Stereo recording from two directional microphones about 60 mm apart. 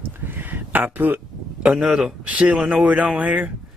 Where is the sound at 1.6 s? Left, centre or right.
Centre.